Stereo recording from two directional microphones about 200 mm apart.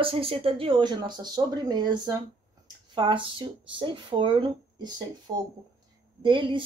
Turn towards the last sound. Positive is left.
turn(degrees=-25)  # may be behind; listen again after turning